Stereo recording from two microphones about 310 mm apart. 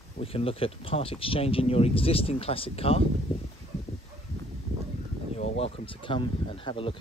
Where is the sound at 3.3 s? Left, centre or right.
Centre.